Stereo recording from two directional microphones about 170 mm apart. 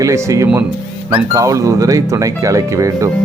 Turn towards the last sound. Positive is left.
turn(degrees=-20)  # may be behind; listen again after turning